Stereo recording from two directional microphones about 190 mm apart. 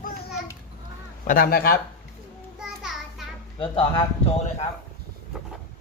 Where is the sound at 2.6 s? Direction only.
Centre (ahead or behind).